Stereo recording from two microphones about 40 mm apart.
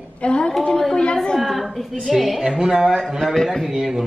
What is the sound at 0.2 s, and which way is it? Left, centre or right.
Speech, left.